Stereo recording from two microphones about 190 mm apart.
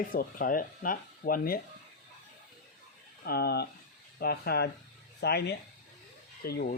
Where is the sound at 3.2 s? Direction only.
55° left (ahead or behind).